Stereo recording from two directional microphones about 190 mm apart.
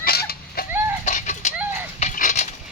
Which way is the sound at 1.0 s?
40° left (ahead or behind).